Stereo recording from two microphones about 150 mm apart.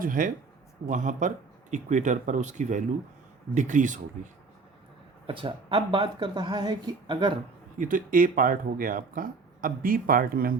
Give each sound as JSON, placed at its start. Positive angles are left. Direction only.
{"t": 0.0, "sound": "speech", "side_deg": -60}
{"t": 5.2, "sound": "speech", "side_deg": -35}
{"t": 7.8, "sound": "speech", "side_deg": -60}